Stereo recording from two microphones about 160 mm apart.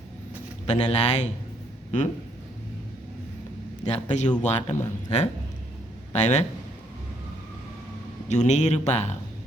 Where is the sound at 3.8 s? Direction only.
45° left (ahead or behind).